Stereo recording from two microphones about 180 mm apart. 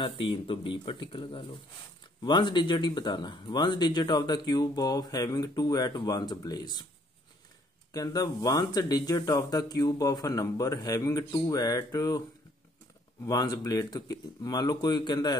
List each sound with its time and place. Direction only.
0.0 s speech: 30° left (ahead or behind)
7.9 s speech: 20° left (ahead or behind)
13.2 s speech: 20° left (ahead or behind)